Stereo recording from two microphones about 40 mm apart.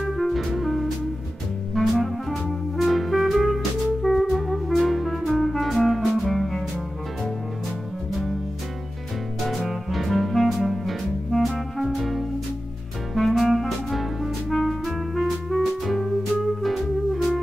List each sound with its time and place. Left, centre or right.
0.1 s music: centre
9.7 s music: centre